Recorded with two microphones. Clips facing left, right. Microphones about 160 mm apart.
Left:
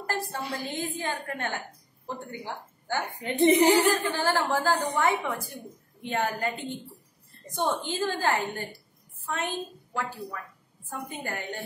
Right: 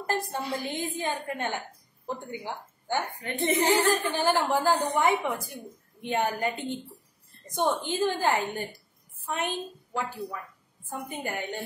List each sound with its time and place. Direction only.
0.0 s a woman's voice: 20° right (ahead or behind)
3.2 s speech: 20° left (ahead or behind)
3.9 s a woman's voice: 15° right (ahead or behind)